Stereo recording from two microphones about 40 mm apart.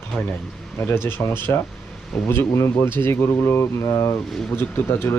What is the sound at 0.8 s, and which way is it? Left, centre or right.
Speech, left.